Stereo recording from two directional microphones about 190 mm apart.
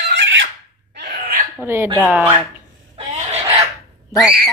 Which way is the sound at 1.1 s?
40° right (ahead or behind).